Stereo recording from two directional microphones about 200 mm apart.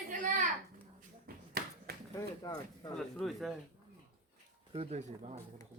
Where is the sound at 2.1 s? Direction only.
20° left (ahead or behind).